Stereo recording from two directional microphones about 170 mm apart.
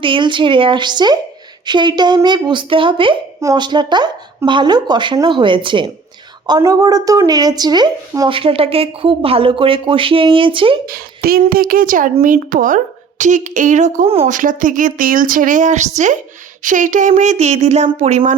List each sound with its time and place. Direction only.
0.0 s a woman's voice: 30° right (ahead or behind)
10.8 s a woman's voice: 60° right (ahead or behind); by 18.3 s 45° right (ahead or behind)